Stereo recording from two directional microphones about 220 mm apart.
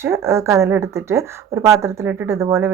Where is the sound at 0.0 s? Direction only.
10° right (ahead or behind).